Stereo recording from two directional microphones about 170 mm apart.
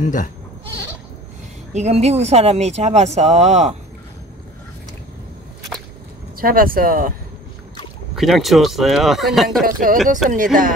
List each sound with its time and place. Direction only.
0.0 s speech: 50° left (ahead or behind)
1.7 s speech: 40° right (ahead or behind)
6.3 s speech: 60° right (ahead or behind)
8.2 s speech: centre (ahead or behind)
9.6 s speech: 55° right (ahead or behind)